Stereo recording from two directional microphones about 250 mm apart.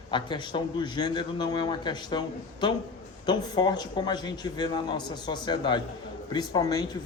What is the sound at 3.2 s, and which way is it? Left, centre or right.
Speech, centre.